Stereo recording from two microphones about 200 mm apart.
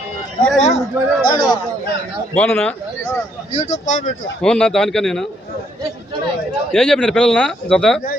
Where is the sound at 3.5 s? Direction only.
25° left (ahead or behind).